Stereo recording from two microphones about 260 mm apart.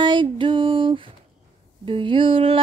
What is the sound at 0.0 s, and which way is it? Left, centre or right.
Music, centre.